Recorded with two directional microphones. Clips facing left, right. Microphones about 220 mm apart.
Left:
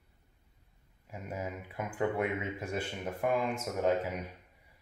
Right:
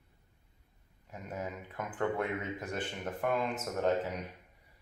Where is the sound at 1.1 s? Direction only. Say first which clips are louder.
Left 1 dB; 10° left (ahead or behind).